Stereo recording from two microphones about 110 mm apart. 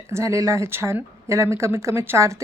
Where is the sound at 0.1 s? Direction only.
25° right (ahead or behind).